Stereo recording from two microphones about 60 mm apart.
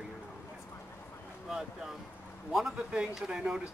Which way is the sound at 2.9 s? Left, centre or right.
Centre.